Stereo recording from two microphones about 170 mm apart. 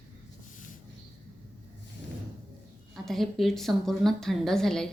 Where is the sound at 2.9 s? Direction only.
Centre (ahead or behind).